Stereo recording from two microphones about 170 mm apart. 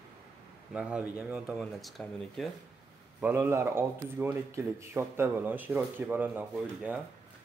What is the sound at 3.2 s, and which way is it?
Speech, 10° right (ahead or behind).